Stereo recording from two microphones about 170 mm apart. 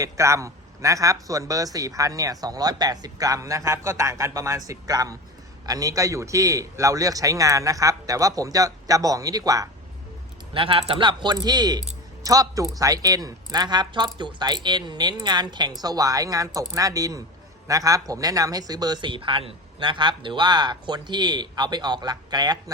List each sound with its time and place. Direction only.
0.0 s a man's voice: 15° right (ahead or behind)
10.5 s a man's voice: 30° right (ahead or behind)